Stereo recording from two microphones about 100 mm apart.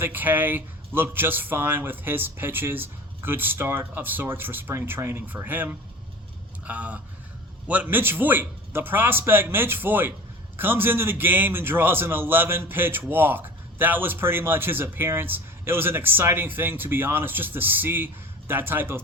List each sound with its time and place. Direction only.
0.0 s a man's voice: 20° right (ahead or behind)